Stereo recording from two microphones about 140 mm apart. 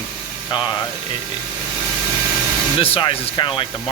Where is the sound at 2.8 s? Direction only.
40° left (ahead or behind).